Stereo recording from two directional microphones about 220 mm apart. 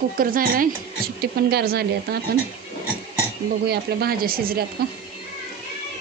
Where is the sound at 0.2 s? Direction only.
40° right (ahead or behind).